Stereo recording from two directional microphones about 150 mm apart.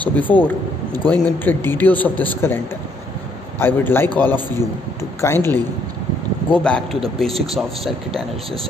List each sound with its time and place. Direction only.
0.0 s a man's voice: 10° left (ahead or behind)